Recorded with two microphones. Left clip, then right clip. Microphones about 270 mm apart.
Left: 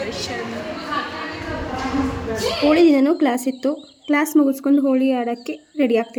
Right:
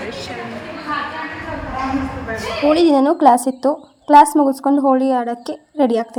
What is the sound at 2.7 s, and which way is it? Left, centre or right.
Speech, centre.